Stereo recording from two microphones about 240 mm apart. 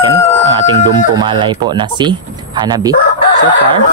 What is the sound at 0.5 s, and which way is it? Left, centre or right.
Speech, centre.